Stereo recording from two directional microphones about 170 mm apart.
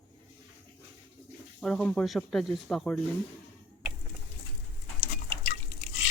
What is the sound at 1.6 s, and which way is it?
Speech, 5° left (ahead or behind).